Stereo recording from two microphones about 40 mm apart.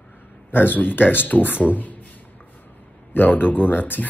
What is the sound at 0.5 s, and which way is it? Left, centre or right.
Speech, left.